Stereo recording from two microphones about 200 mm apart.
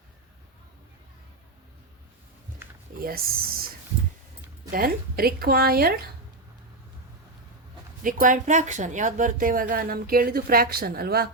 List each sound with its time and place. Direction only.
3.0 s speech: 50° right (ahead or behind)
4.7 s speech: 50° right (ahead or behind)
8.0 s speech: 40° right (ahead or behind)